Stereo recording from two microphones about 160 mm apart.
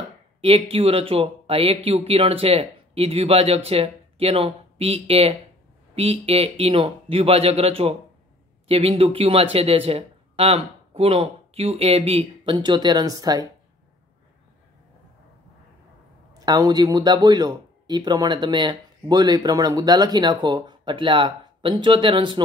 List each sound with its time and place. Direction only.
0.4 s speech: 35° right (ahead or behind)
16.3 s speech: 25° right (ahead or behind)